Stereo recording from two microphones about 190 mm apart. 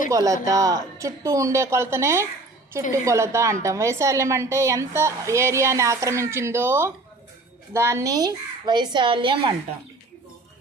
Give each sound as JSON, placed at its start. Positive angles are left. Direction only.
{"t": 0.1, "sound": "a woman's voice", "side_deg": -15}